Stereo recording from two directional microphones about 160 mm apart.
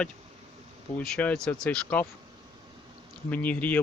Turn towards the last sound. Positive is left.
turn(degrees=10)  # may be behind; listen again after turning